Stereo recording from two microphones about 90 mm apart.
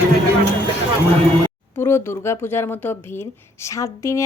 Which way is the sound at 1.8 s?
30° left (ahead or behind).